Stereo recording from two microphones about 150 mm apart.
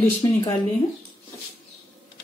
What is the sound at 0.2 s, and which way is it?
Speech, 25° left (ahead or behind).